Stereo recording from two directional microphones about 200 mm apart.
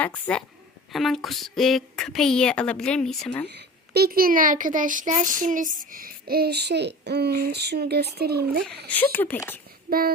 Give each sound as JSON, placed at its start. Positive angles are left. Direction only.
{"t": 0.0, "sound": "a woman's voice", "side_deg": 5}
{"t": 3.5, "sound": "speech", "side_deg": -50}
{"t": 8.9, "sound": "speech", "side_deg": 10}